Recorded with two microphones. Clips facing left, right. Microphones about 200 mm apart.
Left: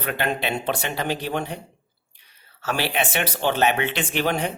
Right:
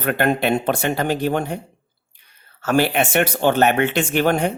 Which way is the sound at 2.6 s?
50° right (ahead or behind).